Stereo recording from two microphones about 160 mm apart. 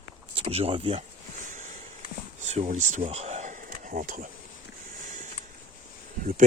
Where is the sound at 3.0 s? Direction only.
40° right (ahead or behind); by 4.2 s 60° right (ahead or behind).